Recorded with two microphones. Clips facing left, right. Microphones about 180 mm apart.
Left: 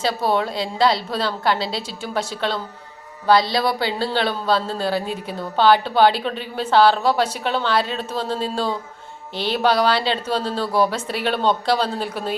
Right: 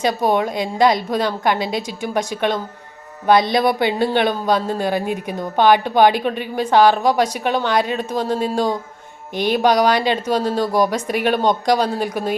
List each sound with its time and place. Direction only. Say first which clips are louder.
0.2 s a man's voice: right 3 dB; 15° right (ahead or behind)